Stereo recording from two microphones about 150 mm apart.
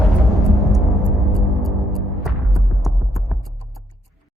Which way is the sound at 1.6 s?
Centre (ahead or behind).